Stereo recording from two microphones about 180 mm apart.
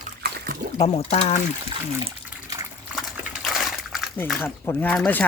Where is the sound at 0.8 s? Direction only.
35° left (ahead or behind).